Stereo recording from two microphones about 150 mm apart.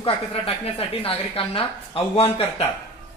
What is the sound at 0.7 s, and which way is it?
Speech, 40° left (ahead or behind).